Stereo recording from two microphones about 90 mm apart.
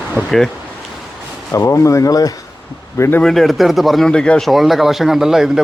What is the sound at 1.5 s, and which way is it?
Speech, 35° left (ahead or behind).